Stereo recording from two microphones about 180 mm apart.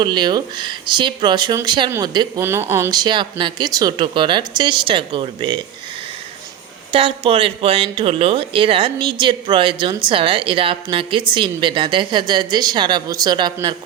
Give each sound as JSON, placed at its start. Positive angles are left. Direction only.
{"t": 0.0, "sound": "speech", "side_deg": -25}
{"t": 6.9, "sound": "speech", "side_deg": -30}